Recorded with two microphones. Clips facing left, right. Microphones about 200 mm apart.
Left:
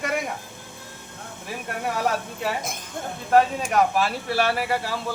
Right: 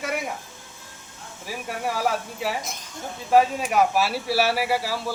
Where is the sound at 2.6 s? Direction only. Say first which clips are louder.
Left 4 dB; 55° left (ahead or behind).